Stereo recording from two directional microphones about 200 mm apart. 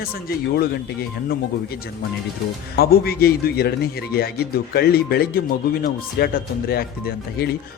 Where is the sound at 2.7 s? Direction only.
50° left (ahead or behind).